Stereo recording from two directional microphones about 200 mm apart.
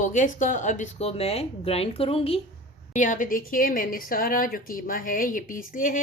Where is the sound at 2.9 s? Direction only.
40° left (ahead or behind).